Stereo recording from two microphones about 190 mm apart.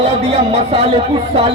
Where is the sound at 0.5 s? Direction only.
35° right (ahead or behind).